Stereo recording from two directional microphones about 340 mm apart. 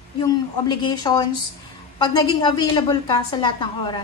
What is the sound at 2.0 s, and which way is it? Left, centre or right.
A woman's voice, centre.